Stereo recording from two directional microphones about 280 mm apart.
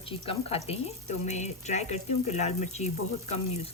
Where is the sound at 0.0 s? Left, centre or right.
Centre.